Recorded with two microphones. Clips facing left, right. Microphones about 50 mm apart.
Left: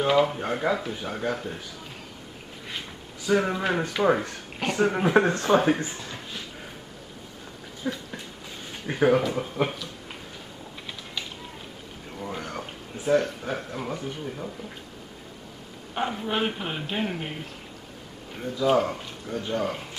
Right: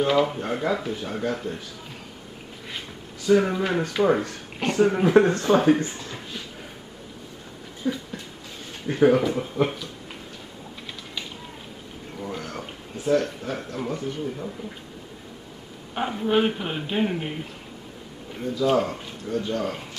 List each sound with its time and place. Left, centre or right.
0.0 s speech: centre
3.3 s speech: centre
5.9 s a sound: centre
7.8 s speech: centre
8.9 s speech: centre
12.2 s a sound: centre
15.9 s speech: centre
18.6 s speech: centre
19.4 s speech: centre